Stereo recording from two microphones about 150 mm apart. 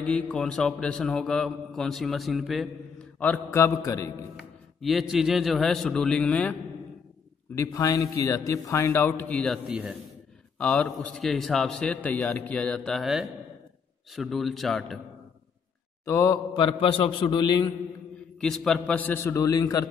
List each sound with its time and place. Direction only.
0.0 s a man's voice: 5° left (ahead or behind)
3.2 s a man's voice: 15° left (ahead or behind)
4.8 s a man's voice: centre (ahead or behind)
7.5 s a man's voice: 20° left (ahead or behind)
9.4 s a man's voice: centre (ahead or behind)
16.1 s a man's voice: 25° left (ahead or behind)
18.4 s a man's voice: centre (ahead or behind); by 19.9 s 25° left (ahead or behind)